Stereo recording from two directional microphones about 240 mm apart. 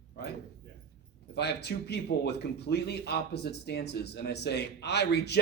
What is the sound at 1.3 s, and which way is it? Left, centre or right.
Speech, left.